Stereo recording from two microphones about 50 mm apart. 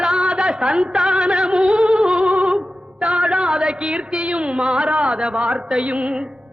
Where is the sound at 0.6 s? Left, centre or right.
Centre.